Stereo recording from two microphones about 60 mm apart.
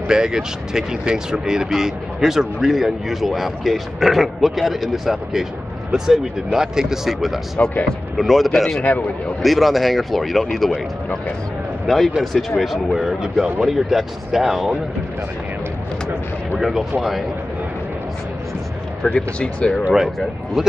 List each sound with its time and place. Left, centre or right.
0.1 s speech: centre
7.6 s speech: left
8.2 s speech: centre
12.2 s speech: centre
16.5 s speech: centre
19.0 s speech: centre